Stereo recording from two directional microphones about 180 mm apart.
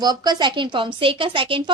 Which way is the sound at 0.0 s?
20° right (ahead or behind).